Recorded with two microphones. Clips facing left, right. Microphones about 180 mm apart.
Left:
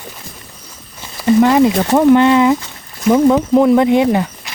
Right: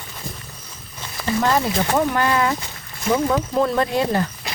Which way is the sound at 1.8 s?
20° left (ahead or behind).